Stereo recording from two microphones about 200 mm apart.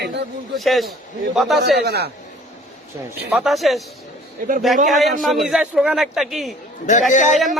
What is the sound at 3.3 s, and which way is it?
Speech, centre (ahead or behind).